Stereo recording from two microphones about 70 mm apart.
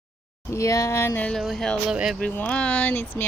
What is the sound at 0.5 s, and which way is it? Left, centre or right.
Speech, left.